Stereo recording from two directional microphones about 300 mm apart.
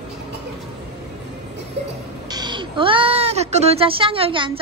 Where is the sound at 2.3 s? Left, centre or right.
Centre.